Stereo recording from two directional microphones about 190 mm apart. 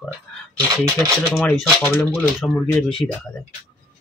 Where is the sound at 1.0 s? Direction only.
5° left (ahead or behind).